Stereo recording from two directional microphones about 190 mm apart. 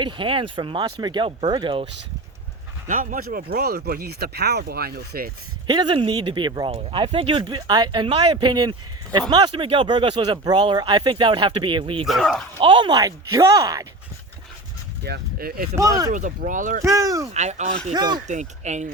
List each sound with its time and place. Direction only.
0.0 s speech: 25° right (ahead or behind)
2.8 s speech: 45° right (ahead or behind)
5.6 s speech: 25° right (ahead or behind)
12.0 s speech: centre (ahead or behind)
12.5 s speech: 25° right (ahead or behind)
15.0 s speech: 55° right (ahead or behind)
15.7 s speech: 15° right (ahead or behind)
16.1 s speech: 45° right (ahead or behind)
16.8 s speech: 15° right (ahead or behind)
17.3 s speech: 35° right (ahead or behind)
17.9 s speech: 20° right (ahead or behind)
18.3 s speech: 40° right (ahead or behind)